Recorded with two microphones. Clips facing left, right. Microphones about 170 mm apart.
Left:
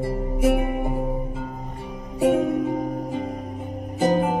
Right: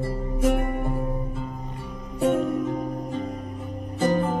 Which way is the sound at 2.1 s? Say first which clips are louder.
Left 3 dB; 10° left (ahead or behind).